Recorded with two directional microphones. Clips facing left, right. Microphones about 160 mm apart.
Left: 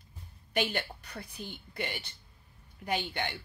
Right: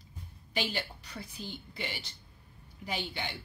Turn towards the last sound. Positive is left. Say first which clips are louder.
# left 4 dB
turn(degrees=55)  # may be behind; listen again after turning